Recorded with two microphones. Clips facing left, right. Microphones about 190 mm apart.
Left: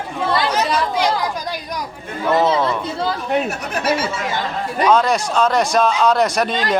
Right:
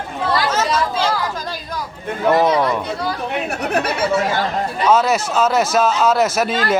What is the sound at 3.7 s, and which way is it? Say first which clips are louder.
Speech: right 4 dB; 60° right (ahead or behind).